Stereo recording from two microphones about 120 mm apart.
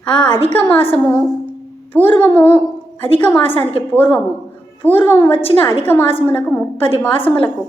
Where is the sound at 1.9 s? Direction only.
15° left (ahead or behind).